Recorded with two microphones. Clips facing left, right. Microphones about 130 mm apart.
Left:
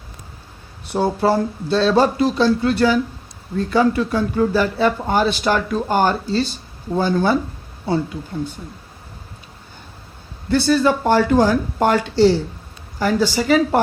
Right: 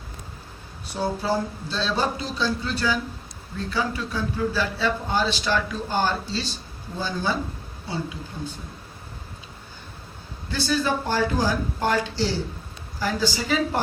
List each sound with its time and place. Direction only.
0.9 s speech: 65° left (ahead or behind)
10.5 s speech: 60° left (ahead or behind)